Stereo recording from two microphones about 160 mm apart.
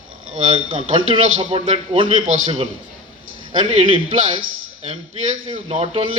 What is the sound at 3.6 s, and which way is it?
Speech, 40° right (ahead or behind).